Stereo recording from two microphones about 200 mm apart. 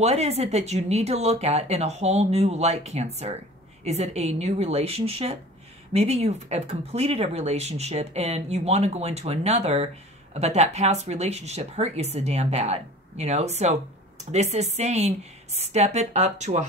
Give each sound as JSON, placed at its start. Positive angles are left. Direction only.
{"t": 0.0, "sound": "speech", "side_deg": -35}